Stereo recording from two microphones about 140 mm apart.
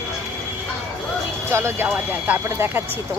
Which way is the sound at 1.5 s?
20° right (ahead or behind).